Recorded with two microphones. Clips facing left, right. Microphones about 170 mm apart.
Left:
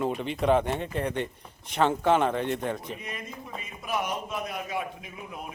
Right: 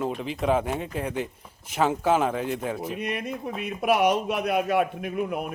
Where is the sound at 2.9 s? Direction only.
75° right (ahead or behind).